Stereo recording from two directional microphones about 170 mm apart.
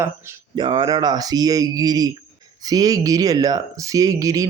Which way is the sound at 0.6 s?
25° right (ahead or behind).